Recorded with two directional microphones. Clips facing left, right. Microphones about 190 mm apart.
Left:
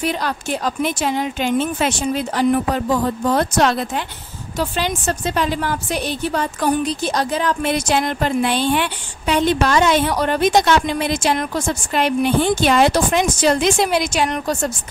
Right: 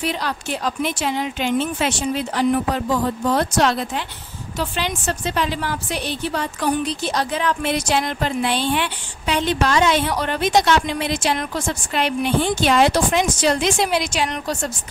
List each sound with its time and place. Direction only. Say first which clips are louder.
0.0 s a woman's voice: left 2 dB; 50° left (ahead or behind)